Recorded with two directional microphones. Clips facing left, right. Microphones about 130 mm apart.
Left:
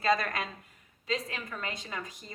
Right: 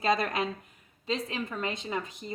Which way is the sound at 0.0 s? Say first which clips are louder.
Right 1 dB; 20° right (ahead or behind).